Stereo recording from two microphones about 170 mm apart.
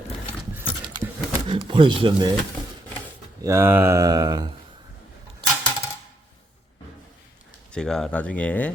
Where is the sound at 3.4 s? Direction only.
15° right (ahead or behind).